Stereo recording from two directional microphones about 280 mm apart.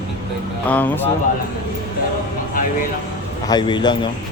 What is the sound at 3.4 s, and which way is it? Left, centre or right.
Speech, centre.